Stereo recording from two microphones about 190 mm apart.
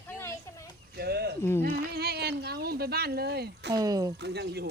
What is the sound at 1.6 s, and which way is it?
Speech, 55° right (ahead or behind).